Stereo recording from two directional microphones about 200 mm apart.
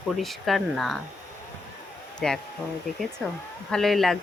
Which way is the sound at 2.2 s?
5° left (ahead or behind).